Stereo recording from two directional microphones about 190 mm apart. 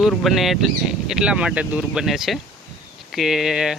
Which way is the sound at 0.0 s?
Centre (ahead or behind).